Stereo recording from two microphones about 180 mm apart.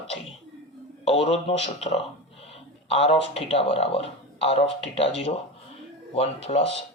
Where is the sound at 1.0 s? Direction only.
35° left (ahead or behind).